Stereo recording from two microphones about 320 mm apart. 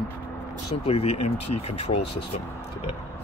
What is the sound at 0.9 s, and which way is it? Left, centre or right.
Speech, centre.